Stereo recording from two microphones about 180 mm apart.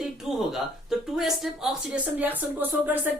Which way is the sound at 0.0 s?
Centre (ahead or behind).